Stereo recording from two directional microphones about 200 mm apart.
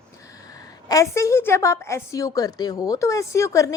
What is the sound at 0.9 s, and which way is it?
A woman's voice, 15° left (ahead or behind).